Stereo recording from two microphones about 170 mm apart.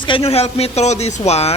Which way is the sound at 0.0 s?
30° left (ahead or behind).